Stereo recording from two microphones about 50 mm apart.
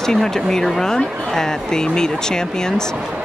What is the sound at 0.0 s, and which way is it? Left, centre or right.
Speech, centre.